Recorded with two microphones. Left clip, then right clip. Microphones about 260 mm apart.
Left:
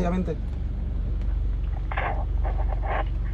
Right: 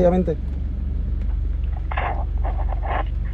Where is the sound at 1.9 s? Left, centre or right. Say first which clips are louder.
Right 3 dB; right.